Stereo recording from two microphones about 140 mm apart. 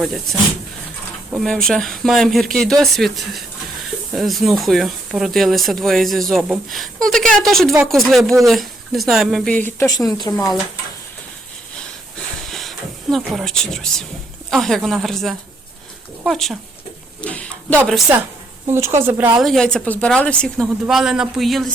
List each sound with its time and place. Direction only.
0.0 s speech: centre (ahead or behind)
1.4 s speech: 5° left (ahead or behind); by 10.3 s 25° left (ahead or behind)
10.3 s speech: centre (ahead or behind)
12.5 s a sound: centre (ahead or behind)
14.5 s speech: centre (ahead or behind)
17.2 s a sound: 10° left (ahead or behind)
18.1 s speech: 10° right (ahead or behind)
19.4 s speech: centre (ahead or behind)
20.8 s speech: 5° right (ahead or behind)